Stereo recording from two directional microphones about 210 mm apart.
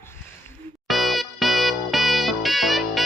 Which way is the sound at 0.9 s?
Centre (ahead or behind).